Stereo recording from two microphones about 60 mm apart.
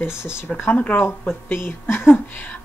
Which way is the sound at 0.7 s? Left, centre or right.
Left.